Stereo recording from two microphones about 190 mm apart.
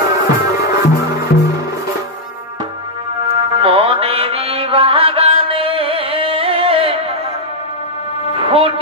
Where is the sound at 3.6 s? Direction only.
30° right (ahead or behind).